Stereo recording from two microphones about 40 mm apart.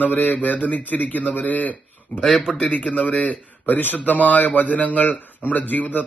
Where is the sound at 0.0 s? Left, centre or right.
Left.